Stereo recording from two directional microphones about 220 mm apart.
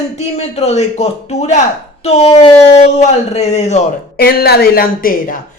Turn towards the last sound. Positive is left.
turn(degrees=40)  # may be behind; listen again after turning